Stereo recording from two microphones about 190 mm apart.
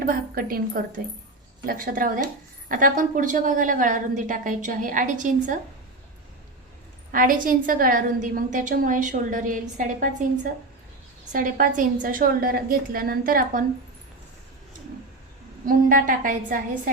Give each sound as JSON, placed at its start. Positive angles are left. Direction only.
{"t": 0.0, "sound": "a woman's voice", "side_deg": -50}
{"t": 7.1, "sound": "a woman's voice", "side_deg": -45}
{"t": 11.3, "sound": "a woman's voice", "side_deg": -45}
{"t": 15.6, "sound": "a woman's voice", "side_deg": -45}